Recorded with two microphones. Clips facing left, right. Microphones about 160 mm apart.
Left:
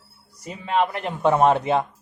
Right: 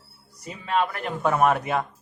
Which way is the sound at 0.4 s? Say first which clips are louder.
Left 2 dB; 25° left (ahead or behind).